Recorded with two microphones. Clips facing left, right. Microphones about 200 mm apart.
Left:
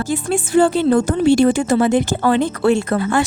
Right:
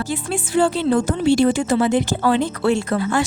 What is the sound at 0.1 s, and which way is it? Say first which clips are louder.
Speech: left 7 dB; 45° left (ahead or behind).